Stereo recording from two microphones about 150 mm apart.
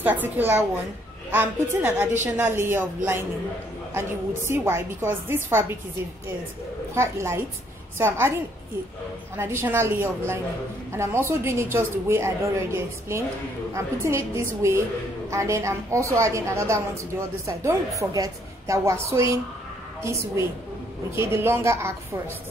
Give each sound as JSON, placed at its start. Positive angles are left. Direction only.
{"t": 0.0, "sound": "a woman's voice", "side_deg": -10}
{"t": 4.5, "sound": "a woman's voice", "side_deg": -15}
{"t": 7.0, "sound": "a woman's voice", "side_deg": -20}
{"t": 9.4, "sound": "a woman's voice", "side_deg": -15}
{"t": 13.7, "sound": "a woman's voice", "side_deg": -20}